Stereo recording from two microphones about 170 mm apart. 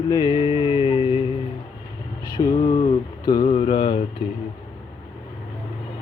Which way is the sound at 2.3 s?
25° left (ahead or behind).